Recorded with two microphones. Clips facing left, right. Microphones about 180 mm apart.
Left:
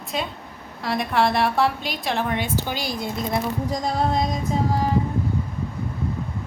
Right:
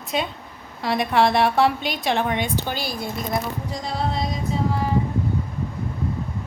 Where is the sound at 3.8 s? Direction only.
45° left (ahead or behind).